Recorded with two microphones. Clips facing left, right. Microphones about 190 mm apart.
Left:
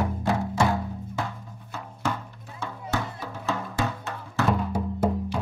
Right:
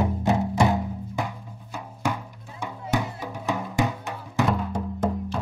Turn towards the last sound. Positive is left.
turn(degrees=0)  # may be behind; listen again after turning